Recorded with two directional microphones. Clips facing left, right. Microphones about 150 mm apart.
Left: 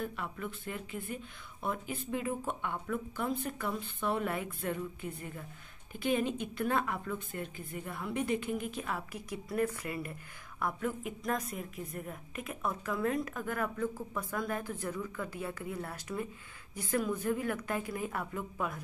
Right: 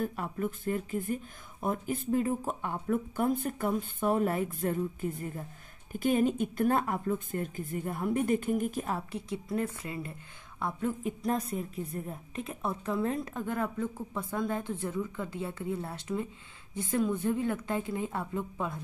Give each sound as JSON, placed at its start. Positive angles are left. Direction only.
{"t": 0.0, "sound": "a woman's voice", "side_deg": -40}